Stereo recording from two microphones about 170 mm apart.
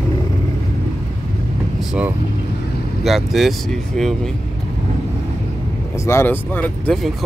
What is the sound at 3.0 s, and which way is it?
Speech, centre (ahead or behind).